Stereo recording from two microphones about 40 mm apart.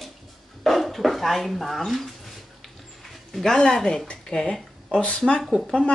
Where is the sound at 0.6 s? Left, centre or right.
Centre.